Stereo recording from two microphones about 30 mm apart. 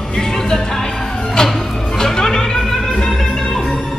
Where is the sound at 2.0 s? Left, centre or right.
Centre.